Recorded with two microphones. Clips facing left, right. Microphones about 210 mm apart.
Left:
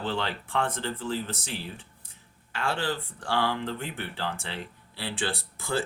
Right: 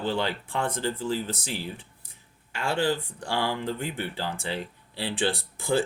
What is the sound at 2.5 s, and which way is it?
Speech, 15° right (ahead or behind).